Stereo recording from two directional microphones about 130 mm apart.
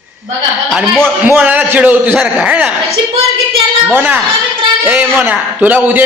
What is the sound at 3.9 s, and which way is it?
A man's voice, 15° right (ahead or behind).